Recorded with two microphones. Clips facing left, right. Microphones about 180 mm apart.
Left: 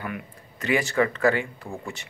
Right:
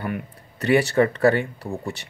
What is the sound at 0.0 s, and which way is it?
A man's voice, 35° right (ahead or behind).